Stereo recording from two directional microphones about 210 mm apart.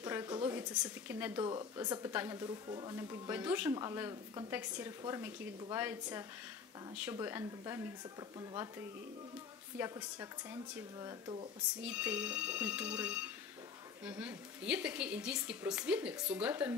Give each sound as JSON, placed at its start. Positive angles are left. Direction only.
{"t": 0.0, "sound": "speech", "side_deg": -15}
{"t": 9.8, "sound": "speech", "side_deg": -10}
{"t": 11.8, "sound": "a woman's voice", "side_deg": -5}